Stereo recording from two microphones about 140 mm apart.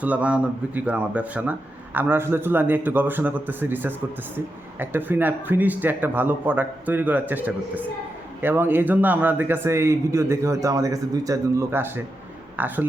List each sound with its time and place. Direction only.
0.0 s a man's voice: 10° right (ahead or behind)